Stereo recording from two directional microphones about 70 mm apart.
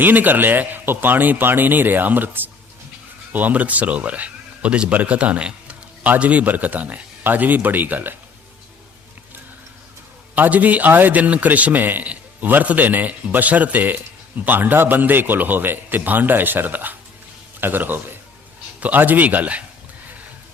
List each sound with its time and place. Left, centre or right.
0.0 s speech: right
10.3 s speech: right